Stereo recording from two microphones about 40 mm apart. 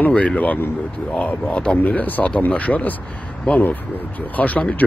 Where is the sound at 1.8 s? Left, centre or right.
Left.